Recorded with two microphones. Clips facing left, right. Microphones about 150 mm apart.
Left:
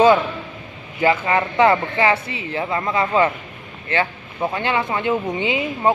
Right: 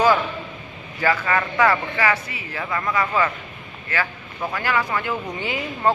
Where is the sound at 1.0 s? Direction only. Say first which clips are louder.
Left 3 dB; 20° left (ahead or behind).